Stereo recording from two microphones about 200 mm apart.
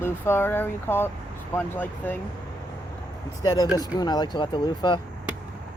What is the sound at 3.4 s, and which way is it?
Speech, 20° left (ahead or behind).